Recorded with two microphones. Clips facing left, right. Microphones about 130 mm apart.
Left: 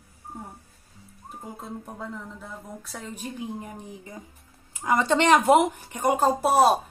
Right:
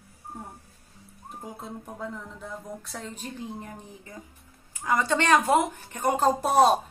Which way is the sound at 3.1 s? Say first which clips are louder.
Left 3 dB; 10° left (ahead or behind).